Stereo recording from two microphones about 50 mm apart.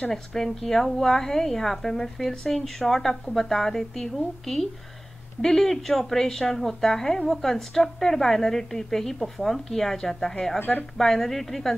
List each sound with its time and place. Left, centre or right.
0.1 s a woman's voice: centre
10.6 s speech: left
11.0 s a woman's voice: centre